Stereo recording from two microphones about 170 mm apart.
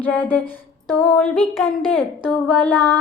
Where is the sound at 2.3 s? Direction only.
10° left (ahead or behind).